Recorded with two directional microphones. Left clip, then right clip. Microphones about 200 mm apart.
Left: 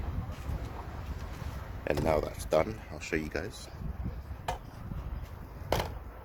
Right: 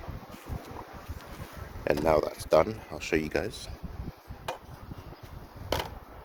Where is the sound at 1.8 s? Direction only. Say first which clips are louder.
Right 4 dB; 15° right (ahead or behind).